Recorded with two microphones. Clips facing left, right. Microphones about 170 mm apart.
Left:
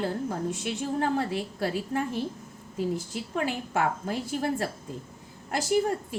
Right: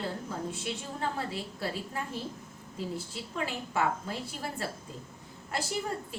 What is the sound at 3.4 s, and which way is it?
Speech, 50° left (ahead or behind).